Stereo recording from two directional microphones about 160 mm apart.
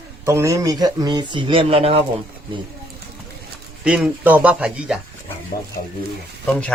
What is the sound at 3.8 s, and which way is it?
Speech, 5° right (ahead or behind).